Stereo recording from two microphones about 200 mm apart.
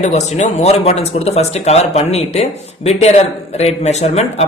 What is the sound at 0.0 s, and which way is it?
Speech, 35° left (ahead or behind).